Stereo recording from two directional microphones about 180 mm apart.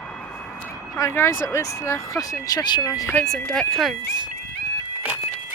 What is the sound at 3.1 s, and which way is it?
Speech, 5° left (ahead or behind).